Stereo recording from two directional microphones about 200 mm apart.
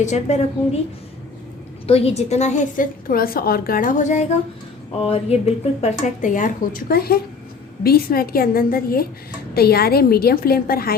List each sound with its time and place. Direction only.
0.0 s a woman's voice: 35° left (ahead or behind)
1.9 s a woman's voice: 30° left (ahead or behind); by 10.9 s 50° left (ahead or behind)